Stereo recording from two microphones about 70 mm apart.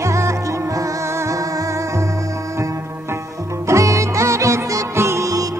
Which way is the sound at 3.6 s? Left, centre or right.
Right.